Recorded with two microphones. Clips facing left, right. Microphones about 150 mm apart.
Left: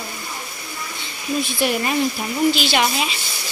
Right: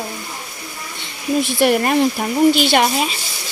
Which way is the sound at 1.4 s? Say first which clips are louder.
Right 6 dB; 65° right (ahead or behind).